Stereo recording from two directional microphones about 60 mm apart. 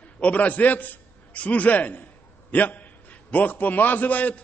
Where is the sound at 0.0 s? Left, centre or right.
Left.